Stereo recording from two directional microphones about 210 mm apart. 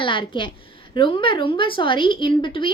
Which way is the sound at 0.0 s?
25° left (ahead or behind).